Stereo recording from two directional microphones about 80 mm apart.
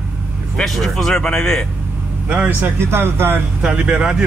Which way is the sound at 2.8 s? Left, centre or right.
Right.